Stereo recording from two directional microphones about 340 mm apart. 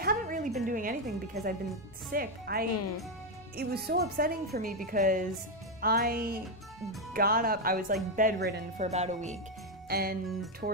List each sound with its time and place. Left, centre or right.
0.0 s a sound: right
0.7 s speech: right
9.8 s music: right